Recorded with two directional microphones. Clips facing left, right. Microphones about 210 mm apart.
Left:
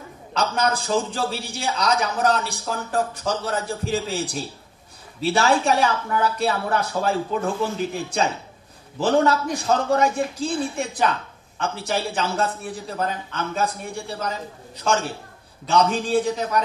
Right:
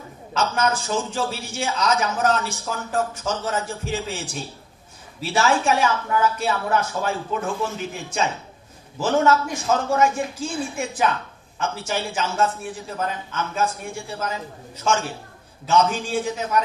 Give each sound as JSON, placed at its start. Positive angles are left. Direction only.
{"t": 0.3, "sound": "a man's voice", "side_deg": 35}